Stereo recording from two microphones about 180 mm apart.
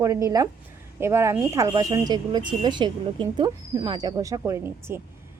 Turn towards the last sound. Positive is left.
turn(degrees=-15)  # may be behind; listen again after turning